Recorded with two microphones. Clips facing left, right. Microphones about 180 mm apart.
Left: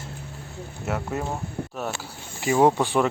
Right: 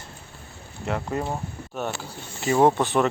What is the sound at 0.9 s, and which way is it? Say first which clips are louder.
Speech: right 1 dB; 5° left (ahead or behind).